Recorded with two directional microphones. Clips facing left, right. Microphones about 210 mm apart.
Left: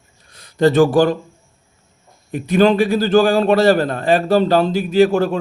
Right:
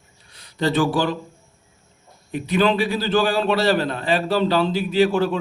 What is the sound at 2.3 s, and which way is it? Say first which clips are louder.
A man's voice: left 5 dB; 45° left (ahead or behind).